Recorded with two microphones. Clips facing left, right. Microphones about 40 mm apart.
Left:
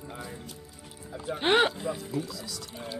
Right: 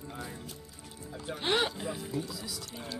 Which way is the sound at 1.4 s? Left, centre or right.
Left.